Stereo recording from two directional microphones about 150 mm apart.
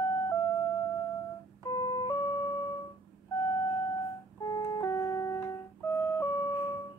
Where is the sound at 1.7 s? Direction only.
25° left (ahead or behind).